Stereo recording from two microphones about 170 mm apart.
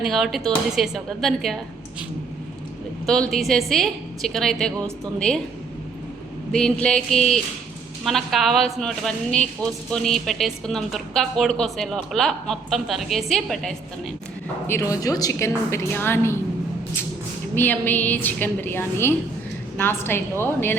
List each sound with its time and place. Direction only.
0.0 s a woman's voice: centre (ahead or behind)
3.1 s a woman's voice: centre (ahead or behind)
6.5 s a woman's voice: 5° left (ahead or behind)
14.7 s a woman's voice: 20° left (ahead or behind)
17.5 s a woman's voice: 10° left (ahead or behind)